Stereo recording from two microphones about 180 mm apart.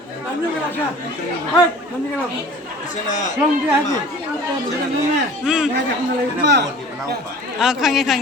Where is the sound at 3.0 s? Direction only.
45° left (ahead or behind).